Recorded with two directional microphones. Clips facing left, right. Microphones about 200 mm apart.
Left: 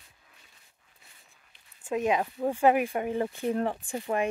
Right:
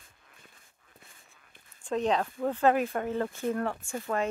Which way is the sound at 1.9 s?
10° left (ahead or behind).